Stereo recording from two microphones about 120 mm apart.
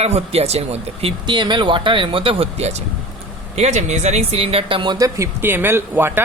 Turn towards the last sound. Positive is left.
turn(degrees=-20)  # may be behind; listen again after turning